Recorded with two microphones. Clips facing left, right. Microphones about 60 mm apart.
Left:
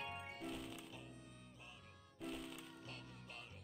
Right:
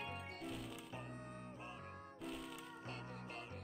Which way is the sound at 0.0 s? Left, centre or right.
Centre.